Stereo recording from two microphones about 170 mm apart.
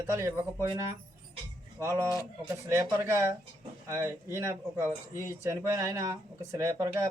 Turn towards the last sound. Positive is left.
turn(degrees=-20)  # may be behind; listen again after turning